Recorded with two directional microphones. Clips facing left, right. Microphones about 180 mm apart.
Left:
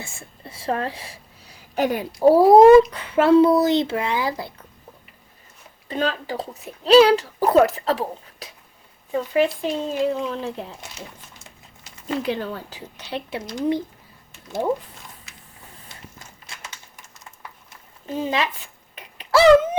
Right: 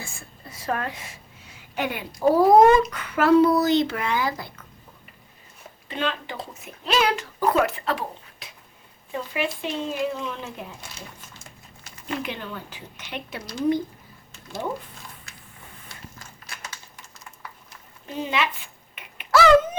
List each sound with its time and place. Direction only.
0.0 s a woman's voice: 25° left (ahead or behind)
5.9 s speech: 40° left (ahead or behind)
12.0 s speech: 35° left (ahead or behind)
15.9 s a sound: 25° left (ahead or behind)
18.2 s speech: 40° left (ahead or behind)
18.9 s a sound: 35° left (ahead or behind)